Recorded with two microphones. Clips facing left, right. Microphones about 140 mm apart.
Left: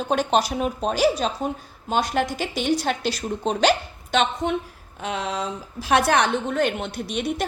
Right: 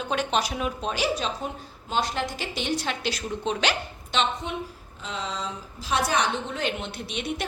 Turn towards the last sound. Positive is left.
turn(degrees=45)  # may be behind; listen again after turning